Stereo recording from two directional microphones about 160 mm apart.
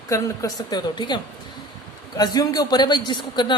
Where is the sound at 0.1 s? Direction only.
25° left (ahead or behind).